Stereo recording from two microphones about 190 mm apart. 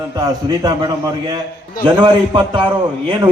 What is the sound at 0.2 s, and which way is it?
A man's voice, 20° right (ahead or behind).